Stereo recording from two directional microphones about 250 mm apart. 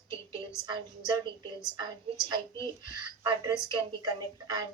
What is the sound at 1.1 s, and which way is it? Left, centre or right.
A woman's voice, centre.